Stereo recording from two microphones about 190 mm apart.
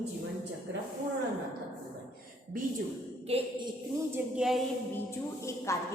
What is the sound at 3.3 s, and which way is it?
Speech, 30° right (ahead or behind).